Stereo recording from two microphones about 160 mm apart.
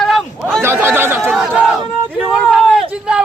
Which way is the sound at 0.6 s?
15° right (ahead or behind).